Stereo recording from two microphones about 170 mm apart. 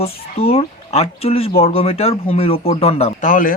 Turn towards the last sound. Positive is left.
turn(degrees=50)  # may be behind; listen again after turning